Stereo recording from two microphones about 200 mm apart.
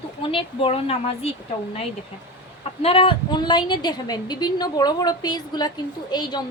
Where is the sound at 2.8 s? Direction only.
25° left (ahead or behind).